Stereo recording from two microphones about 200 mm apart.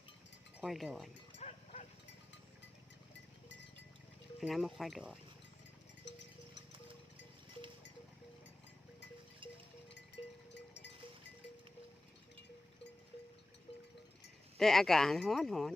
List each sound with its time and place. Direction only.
0.6 s speech: centre (ahead or behind)
1.4 s livestock: 35° left (ahead or behind)
4.4 s speech: centre (ahead or behind)
6.0 s cowbell: 60° left (ahead or behind)
10.2 s sheep: 25° left (ahead or behind)
10.5 s cowbell: 60° left (ahead or behind)
14.6 s speech: centre (ahead or behind)